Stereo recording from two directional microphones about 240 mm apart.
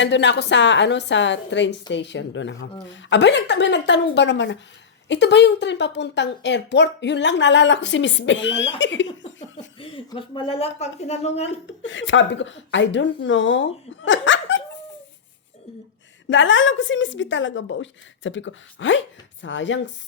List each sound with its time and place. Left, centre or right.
0.0 s a woman's voice: left
9.7 s a woman's voice: left
11.8 s a woman's voice: left
16.3 s a woman's voice: left